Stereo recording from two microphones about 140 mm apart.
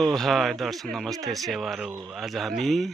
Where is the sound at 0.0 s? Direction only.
Centre (ahead or behind).